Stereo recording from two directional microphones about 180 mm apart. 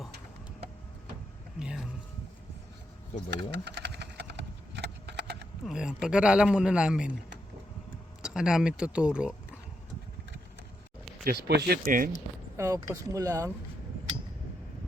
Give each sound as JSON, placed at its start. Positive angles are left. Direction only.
{"t": 1.5, "sound": "a sound", "side_deg": -5}
{"t": 3.2, "sound": "a sound", "side_deg": -70}
{"t": 5.6, "sound": "speech", "side_deg": -5}
{"t": 8.2, "sound": "speech", "side_deg": -5}
{"t": 11.2, "sound": "speech", "side_deg": -60}
{"t": 12.5, "sound": "speech", "side_deg": -15}